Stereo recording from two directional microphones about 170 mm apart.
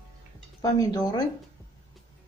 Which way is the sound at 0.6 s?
20° left (ahead or behind).